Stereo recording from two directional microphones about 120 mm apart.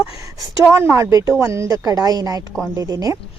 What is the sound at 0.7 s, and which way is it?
A woman's voice, 20° right (ahead or behind).